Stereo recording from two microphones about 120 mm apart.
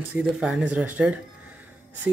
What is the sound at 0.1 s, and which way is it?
Speech, 5° right (ahead or behind).